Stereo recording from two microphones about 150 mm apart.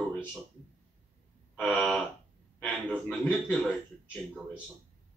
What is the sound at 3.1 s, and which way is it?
Speech, 10° left (ahead or behind).